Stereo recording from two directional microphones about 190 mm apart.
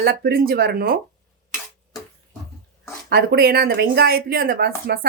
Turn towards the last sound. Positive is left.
turn(degrees=-55)  # may be behind; listen again after turning